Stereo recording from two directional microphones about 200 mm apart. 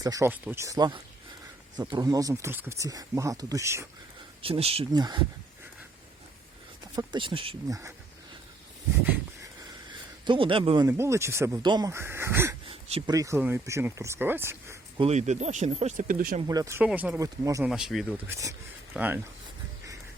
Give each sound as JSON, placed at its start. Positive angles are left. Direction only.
{"t": 0.0, "sound": "speech", "side_deg": -15}
{"t": 4.4, "sound": "speech", "side_deg": -30}
{"t": 6.9, "sound": "speech", "side_deg": -25}
{"t": 10.2, "sound": "speech", "side_deg": -25}
{"t": 12.6, "sound": "speech", "side_deg": -25}
{"t": 14.9, "sound": "speech", "side_deg": -30}
{"t": 16.5, "sound": "speech", "side_deg": -15}
{"t": 17.6, "sound": "speech", "side_deg": -5}
{"t": 18.3, "sound": "speech", "side_deg": -15}